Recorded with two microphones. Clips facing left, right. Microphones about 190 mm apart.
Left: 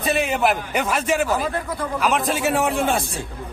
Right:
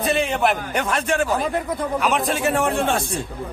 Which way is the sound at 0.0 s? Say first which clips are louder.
Even; 5° left (ahead or behind).